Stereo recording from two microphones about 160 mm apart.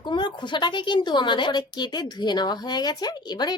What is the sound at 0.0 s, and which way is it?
A woman's voice, 30° left (ahead or behind).